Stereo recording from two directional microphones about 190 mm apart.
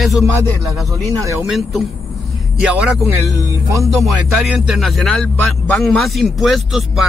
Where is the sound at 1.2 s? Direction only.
15° right (ahead or behind).